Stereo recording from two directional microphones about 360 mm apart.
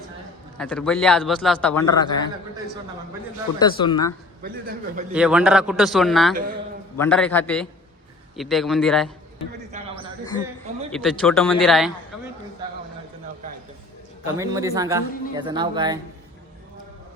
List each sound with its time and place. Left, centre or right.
0.6 s a man's voice: centre
3.6 s a man's voice: centre
4.4 s a man's voice: right
5.1 s a man's voice: centre
9.7 s a sound: centre
10.9 s a man's voice: centre
12.1 s a sound: centre
14.3 s speech: centre